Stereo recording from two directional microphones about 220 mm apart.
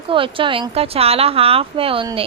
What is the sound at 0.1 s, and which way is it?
A woman's voice, 25° right (ahead or behind).